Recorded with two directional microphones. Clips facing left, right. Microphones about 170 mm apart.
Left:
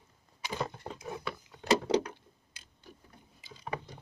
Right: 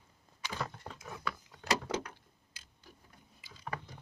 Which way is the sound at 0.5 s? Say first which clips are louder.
Left 4 dB; 20° left (ahead or behind).